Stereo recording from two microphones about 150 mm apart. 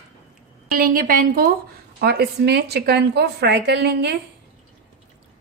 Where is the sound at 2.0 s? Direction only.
90° right.